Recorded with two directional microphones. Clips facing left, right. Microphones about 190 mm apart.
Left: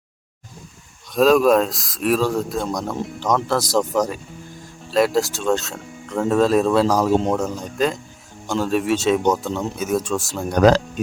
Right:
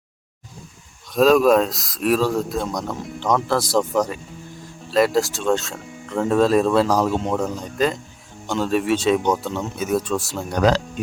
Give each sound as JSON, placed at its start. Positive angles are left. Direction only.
{"t": 1.1, "sound": "speech", "side_deg": 0}
{"t": 10.6, "sound": "speech", "side_deg": 50}